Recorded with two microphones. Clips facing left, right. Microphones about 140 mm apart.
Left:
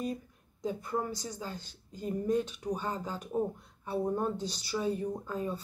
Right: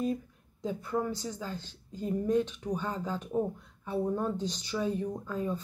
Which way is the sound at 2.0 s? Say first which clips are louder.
Right 2 dB; 10° left (ahead or behind).